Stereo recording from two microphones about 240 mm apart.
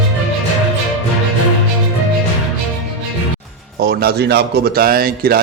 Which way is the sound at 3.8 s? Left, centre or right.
Right.